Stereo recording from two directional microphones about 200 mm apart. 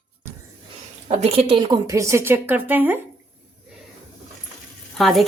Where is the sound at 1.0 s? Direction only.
30° right (ahead or behind); by 3.0 s 10° right (ahead or behind).